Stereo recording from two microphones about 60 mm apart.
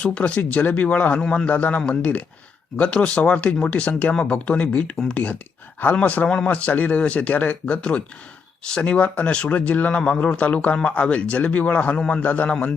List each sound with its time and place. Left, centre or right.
0.0 s speech: left
1.2 s a man's voice: centre
1.5 s a man's voice: left
12.2 s speech: left